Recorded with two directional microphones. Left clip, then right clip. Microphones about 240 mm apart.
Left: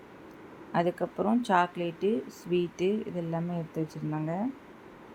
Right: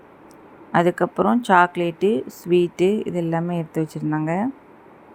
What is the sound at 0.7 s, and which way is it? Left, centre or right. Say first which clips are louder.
Speech: right 10 dB; right.